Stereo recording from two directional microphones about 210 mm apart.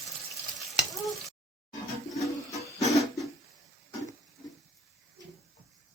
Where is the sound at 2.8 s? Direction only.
15° left (ahead or behind).